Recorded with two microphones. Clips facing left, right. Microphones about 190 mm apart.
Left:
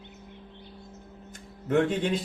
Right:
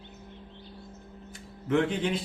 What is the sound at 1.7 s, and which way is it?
Speech, 45° left (ahead or behind).